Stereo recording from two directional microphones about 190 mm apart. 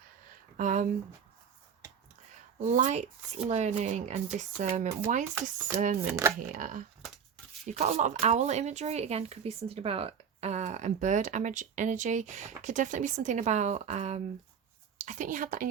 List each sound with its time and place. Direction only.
0.5 s a sound: 40° right (ahead or behind)
2.6 s speech: 40° right (ahead or behind)
6.1 s speech: 15° right (ahead or behind)
6.5 s a woman's voice: 45° right (ahead or behind)